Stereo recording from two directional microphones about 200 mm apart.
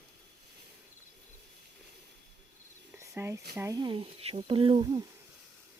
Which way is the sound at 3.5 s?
15° right (ahead or behind).